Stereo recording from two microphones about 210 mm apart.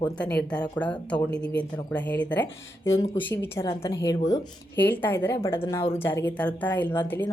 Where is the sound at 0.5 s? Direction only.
5° left (ahead or behind).